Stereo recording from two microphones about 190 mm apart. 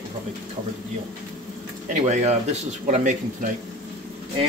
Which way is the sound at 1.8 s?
40° right (ahead or behind).